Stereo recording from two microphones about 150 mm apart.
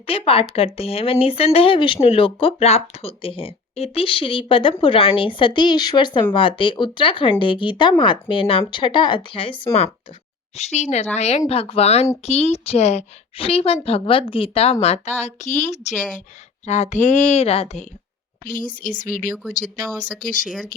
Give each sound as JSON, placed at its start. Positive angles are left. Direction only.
{"t": 0.1, "sound": "speech", "side_deg": 40}
{"t": 10.6, "sound": "a woman's voice", "side_deg": 45}
{"t": 18.4, "sound": "speech", "side_deg": 65}